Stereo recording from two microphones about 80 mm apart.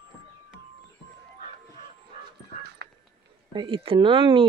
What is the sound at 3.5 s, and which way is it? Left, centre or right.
Speech, right.